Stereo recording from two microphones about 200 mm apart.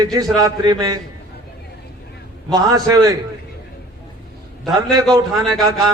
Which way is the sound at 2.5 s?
20° right (ahead or behind).